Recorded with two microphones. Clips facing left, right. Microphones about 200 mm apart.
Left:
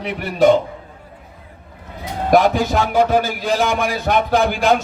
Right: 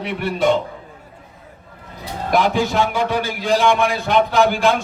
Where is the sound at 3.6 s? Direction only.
40° left (ahead or behind).